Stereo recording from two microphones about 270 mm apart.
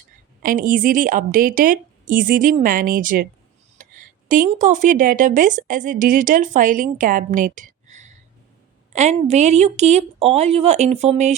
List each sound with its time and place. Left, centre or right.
0.4 s a woman's voice: right